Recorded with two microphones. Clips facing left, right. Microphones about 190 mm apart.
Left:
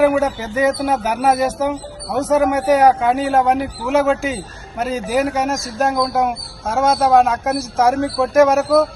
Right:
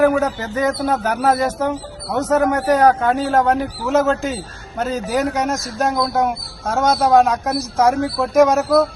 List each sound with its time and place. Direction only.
0.0 s a man's voice: 10° left (ahead or behind)